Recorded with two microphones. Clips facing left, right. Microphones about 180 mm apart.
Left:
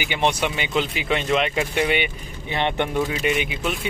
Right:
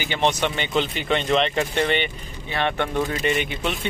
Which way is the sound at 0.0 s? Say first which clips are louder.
Even; 15° left (ahead or behind).